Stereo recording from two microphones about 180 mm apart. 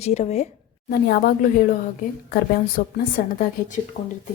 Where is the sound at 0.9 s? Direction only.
55° left (ahead or behind).